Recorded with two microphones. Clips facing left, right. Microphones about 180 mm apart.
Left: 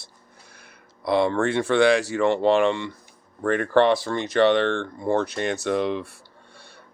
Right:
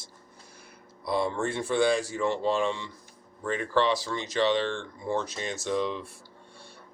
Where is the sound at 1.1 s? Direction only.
75° left (ahead or behind).